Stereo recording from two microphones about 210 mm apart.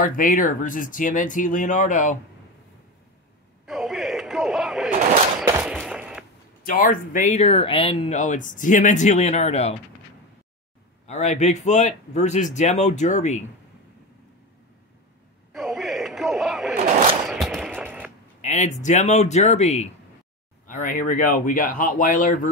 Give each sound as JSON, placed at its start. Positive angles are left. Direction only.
{"t": 0.0, "sound": "speech", "side_deg": 40}
{"t": 3.6, "sound": "a sound", "side_deg": 0}
{"t": 6.6, "sound": "speech", "side_deg": 45}
{"t": 11.1, "sound": "speech", "side_deg": 35}
{"t": 15.5, "sound": "a sound", "side_deg": 0}
{"t": 18.4, "sound": "speech", "side_deg": 35}